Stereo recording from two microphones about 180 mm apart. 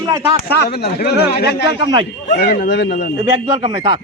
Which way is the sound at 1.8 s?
25° right (ahead or behind).